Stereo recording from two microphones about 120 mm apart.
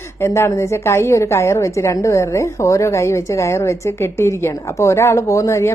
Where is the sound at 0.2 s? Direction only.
20° left (ahead or behind).